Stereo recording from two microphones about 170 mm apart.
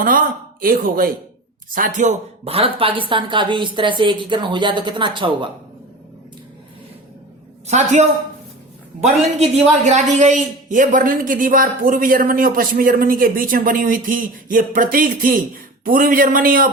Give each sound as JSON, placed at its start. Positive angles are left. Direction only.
{"t": 0.6, "sound": "a man's voice", "side_deg": -55}
{"t": 7.7, "sound": "a woman's voice", "side_deg": -45}